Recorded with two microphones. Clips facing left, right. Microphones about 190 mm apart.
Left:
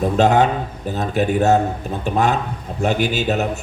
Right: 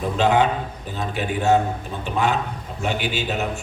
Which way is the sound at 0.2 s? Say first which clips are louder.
Left 2 dB; 45° left (ahead or behind).